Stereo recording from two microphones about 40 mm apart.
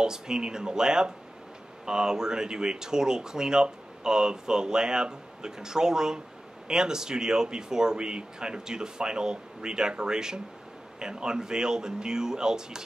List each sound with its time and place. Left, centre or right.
0.0 s speech: centre